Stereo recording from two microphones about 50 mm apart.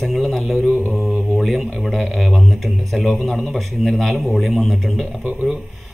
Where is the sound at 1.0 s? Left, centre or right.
Centre.